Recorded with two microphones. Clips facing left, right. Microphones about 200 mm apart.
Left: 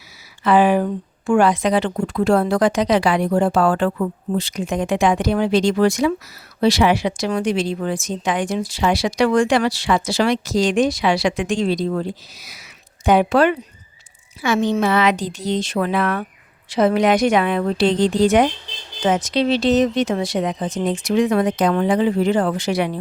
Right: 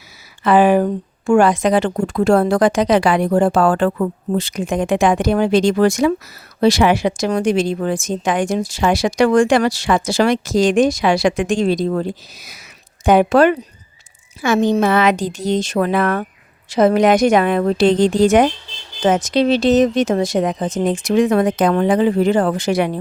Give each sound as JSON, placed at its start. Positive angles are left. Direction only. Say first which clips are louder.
{"t": 0.4, "sound": "a woman's voice", "louder": "right 3 dB", "side_deg": -45}